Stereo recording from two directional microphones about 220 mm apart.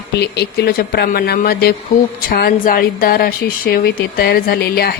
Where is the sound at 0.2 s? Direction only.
50° left (ahead or behind).